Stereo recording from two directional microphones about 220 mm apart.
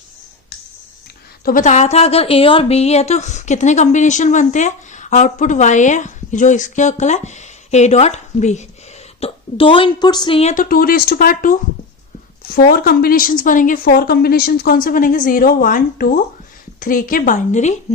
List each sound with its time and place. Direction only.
1.5 s a woman's voice: 35° left (ahead or behind)
10.5 s a woman's voice: 40° left (ahead or behind)